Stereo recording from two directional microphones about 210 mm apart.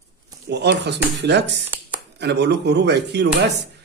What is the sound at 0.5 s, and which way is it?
A man's voice, 55° right (ahead or behind).